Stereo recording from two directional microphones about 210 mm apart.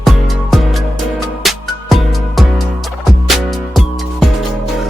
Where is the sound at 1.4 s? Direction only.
Centre (ahead or behind).